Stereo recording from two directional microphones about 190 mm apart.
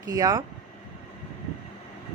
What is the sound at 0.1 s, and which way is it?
Speech, 20° right (ahead or behind).